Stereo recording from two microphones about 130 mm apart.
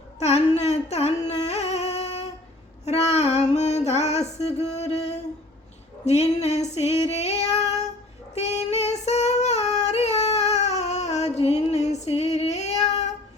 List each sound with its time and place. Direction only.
0.2 s music: 55° left (ahead or behind)
6.1 s female singing: 55° left (ahead or behind)
8.4 s child singing: 55° left (ahead or behind)